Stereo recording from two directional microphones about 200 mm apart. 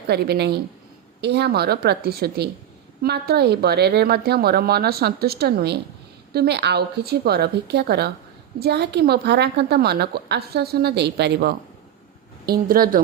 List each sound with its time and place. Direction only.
0.1 s a woman's voice: 55° right (ahead or behind)